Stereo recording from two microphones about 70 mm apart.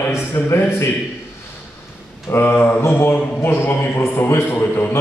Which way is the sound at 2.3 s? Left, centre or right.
Left.